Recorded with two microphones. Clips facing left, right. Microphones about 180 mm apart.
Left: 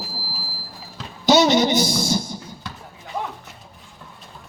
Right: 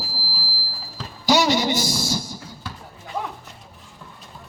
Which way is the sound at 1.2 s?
20° left (ahead or behind).